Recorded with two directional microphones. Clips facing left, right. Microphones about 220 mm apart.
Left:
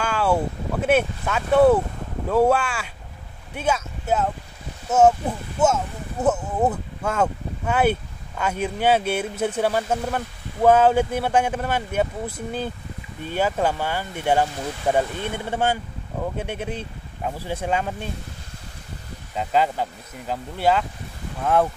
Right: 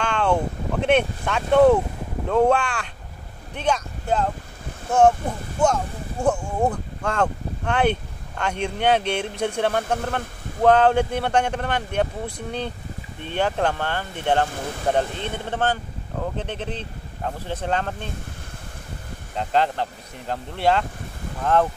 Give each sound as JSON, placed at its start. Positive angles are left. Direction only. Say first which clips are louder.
{"t": 0.0, "sound": "speech", "louder": "even", "side_deg": 5}
{"t": 19.3, "sound": "speech", "louder": "even", "side_deg": 5}